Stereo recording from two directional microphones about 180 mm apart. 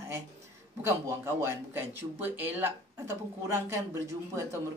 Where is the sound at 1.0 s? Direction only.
15° right (ahead or behind).